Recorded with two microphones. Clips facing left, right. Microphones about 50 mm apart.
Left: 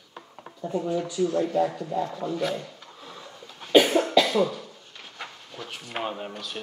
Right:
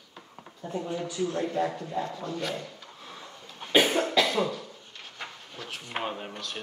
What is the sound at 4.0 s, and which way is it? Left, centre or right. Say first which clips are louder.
Cough: left 3 dB; centre.